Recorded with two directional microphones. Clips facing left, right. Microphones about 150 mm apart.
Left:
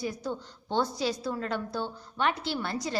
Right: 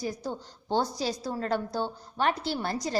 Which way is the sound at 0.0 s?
40° right (ahead or behind).